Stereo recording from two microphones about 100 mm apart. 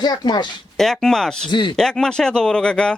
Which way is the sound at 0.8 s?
5° left (ahead or behind).